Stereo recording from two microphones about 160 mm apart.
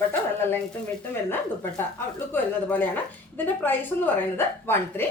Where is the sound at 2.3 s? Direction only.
10° left (ahead or behind).